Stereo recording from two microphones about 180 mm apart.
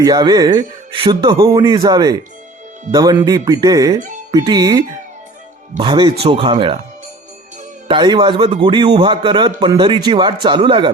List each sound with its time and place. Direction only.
0.0 s speech: 20° right (ahead or behind)
7.9 s speech: 25° right (ahead or behind)